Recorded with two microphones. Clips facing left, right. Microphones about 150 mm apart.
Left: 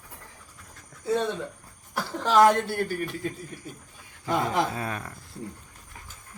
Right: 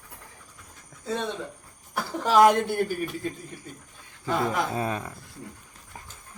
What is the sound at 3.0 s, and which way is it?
Speech, centre (ahead or behind).